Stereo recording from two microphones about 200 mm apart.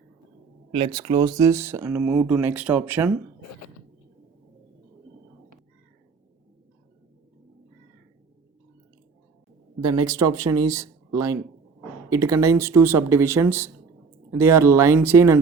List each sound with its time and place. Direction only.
0.7 s speech: 25° right (ahead or behind); by 3.1 s 10° right (ahead or behind)
9.8 s speech: 20° right (ahead or behind)